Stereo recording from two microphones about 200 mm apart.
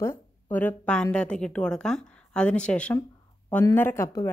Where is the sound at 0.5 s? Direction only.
10° left (ahead or behind).